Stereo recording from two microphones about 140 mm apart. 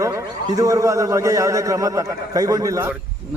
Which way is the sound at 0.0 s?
25° right (ahead or behind).